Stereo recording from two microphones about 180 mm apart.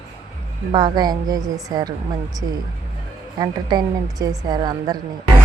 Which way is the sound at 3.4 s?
20° right (ahead or behind).